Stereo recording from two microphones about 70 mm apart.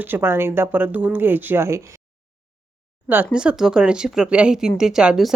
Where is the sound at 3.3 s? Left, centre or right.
Centre.